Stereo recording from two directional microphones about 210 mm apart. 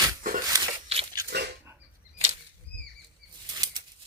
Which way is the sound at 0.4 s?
20° right (ahead or behind).